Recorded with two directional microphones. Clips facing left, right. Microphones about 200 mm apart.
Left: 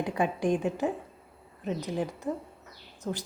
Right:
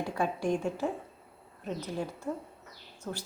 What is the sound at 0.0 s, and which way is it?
Speech, 15° left (ahead or behind).